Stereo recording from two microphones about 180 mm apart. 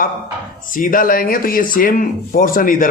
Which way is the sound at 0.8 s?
50° left (ahead or behind).